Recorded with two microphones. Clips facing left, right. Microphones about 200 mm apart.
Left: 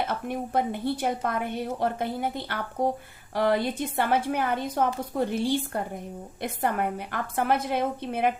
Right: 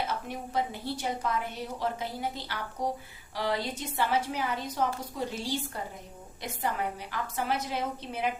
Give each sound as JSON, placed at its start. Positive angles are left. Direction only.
{"t": 0.0, "sound": "a woman's voice", "side_deg": 55}